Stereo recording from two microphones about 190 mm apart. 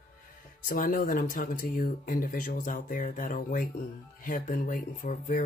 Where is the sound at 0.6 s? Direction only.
45° left (ahead or behind).